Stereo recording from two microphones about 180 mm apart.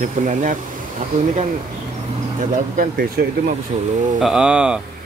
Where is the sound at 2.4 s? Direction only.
55° right (ahead or behind).